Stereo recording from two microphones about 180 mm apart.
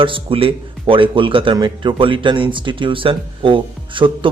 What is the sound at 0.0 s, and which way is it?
A man's voice, 30° right (ahead or behind).